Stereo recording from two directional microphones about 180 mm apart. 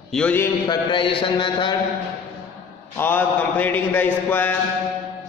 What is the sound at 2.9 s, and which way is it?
A man's voice, 10° left (ahead or behind).